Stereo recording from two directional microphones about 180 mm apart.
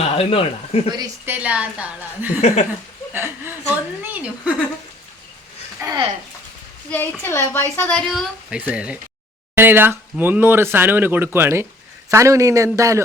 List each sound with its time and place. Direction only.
0.2 s speech: 35° left (ahead or behind)
0.9 s a woman's voice: 20° right (ahead or behind)
1.3 s speech: 5° right (ahead or behind)
5.8 s a woman's voice: 20° right (ahead or behind)
6.9 s speech: 10° left (ahead or behind); by 13.0 s 15° right (ahead or behind)